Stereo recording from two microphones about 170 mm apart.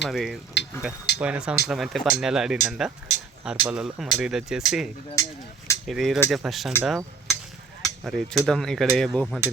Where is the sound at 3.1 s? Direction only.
40° left (ahead or behind).